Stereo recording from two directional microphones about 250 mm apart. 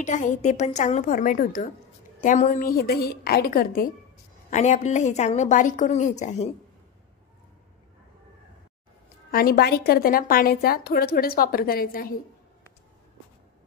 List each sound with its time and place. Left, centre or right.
0.0 s a woman's voice: left
9.3 s a woman's voice: left